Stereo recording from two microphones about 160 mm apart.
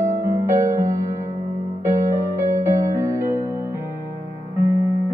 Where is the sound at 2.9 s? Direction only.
20° right (ahead or behind).